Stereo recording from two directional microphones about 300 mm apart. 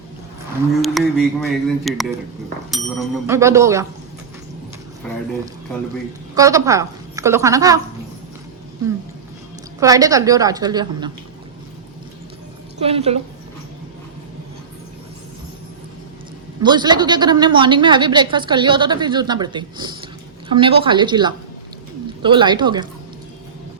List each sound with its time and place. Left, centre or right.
0.8 s a woman's voice: centre
5.0 s speech: centre
6.3 s a woman's voice: centre
9.8 s a woman's voice: centre
12.8 s a woman's voice: centre
16.6 s a woman's voice: centre